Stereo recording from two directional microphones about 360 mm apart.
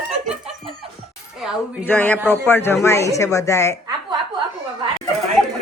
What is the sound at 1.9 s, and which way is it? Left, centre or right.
Speech, centre.